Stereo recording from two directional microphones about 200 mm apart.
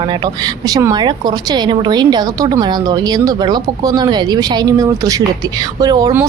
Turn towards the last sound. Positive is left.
turn(degrees=-15)  # may be behind; listen again after turning